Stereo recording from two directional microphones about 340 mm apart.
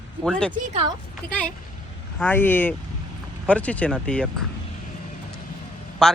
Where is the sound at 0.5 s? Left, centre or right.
Centre.